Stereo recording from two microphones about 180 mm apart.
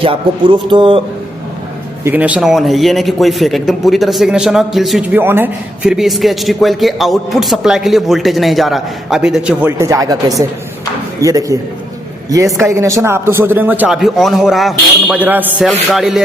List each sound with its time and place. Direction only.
0.0 s speech: 30° right (ahead or behind)
2.0 s a man's voice: 10° right (ahead or behind)
12.5 s a man's voice: 15° right (ahead or behind)